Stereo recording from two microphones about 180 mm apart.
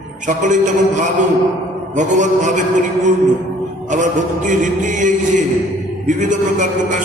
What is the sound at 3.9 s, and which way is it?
A man's voice, 45° right (ahead or behind).